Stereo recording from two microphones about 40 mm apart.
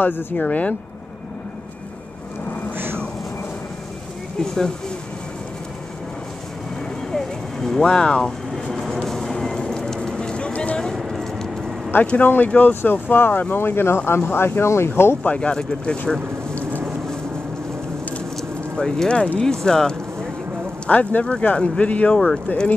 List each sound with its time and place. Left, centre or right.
0.0 s speech: left
0.4 s speech: left
4.4 s speech: centre
7.1 s vehicle: centre
7.8 s speech: left
8.8 s a sound: centre; by 10.8 s left
11.0 s a sound: centre
12.2 s speech: left
13.6 s speech: left
15.2 s speech: left
18.8 s speech: left
19.1 s speech: left
19.4 s speech: centre
20.9 s speech: left